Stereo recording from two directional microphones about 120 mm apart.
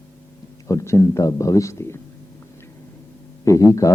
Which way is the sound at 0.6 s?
25° left (ahead or behind).